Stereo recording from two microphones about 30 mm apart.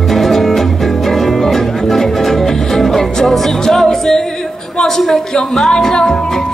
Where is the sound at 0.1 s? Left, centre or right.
Centre.